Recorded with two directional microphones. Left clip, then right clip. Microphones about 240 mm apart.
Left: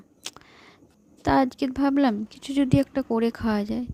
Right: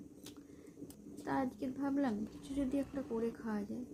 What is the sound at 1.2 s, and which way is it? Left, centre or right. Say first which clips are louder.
A woman's voice: left 16 dB; left.